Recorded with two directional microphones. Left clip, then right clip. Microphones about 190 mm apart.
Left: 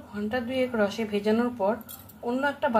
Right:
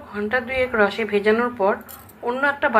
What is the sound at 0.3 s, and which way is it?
A woman's voice, 5° right (ahead or behind).